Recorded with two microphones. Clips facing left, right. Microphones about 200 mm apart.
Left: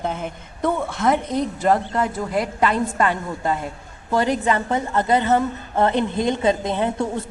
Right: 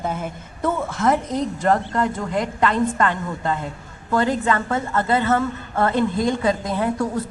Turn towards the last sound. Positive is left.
turn(degrees=25)  # may be behind; listen again after turning